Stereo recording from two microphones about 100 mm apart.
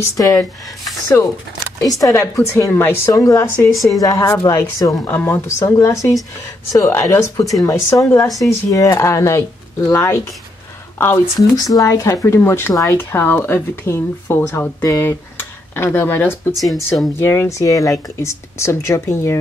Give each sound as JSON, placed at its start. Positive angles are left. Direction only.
{"t": 0.0, "sound": "a woman's voice", "side_deg": 35}
{"t": 1.8, "sound": "a woman's voice", "side_deg": 35}
{"t": 3.7, "sound": "speech", "side_deg": 0}
{"t": 4.0, "sound": "a woman's voice", "side_deg": 30}
{"t": 5.0, "sound": "a woman's voice", "side_deg": 20}
{"t": 11.5, "sound": "a woman's voice", "side_deg": 35}
{"t": 16.5, "sound": "speech", "side_deg": 0}
{"t": 17.2, "sound": "speech", "side_deg": 25}